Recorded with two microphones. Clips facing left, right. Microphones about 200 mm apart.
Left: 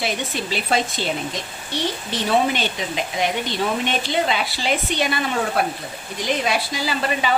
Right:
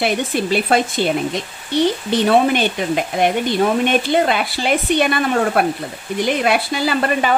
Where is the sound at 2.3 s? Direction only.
55° right (ahead or behind).